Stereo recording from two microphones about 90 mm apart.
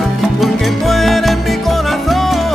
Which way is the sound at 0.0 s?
Centre (ahead or behind).